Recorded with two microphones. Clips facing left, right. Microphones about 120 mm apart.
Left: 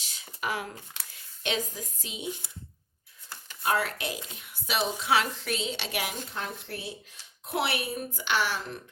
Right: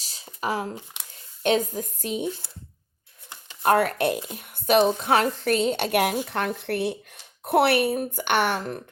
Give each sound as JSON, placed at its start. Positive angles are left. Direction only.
{"t": 0.0, "sound": "a sound", "side_deg": -35}
{"t": 0.4, "sound": "speech", "side_deg": -35}
{"t": 1.4, "sound": "a woman's voice", "side_deg": -45}
{"t": 3.6, "sound": "a woman's voice", "side_deg": -55}
{"t": 6.2, "sound": "speech", "side_deg": -65}